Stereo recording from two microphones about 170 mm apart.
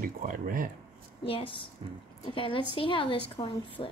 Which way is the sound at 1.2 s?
30° left (ahead or behind).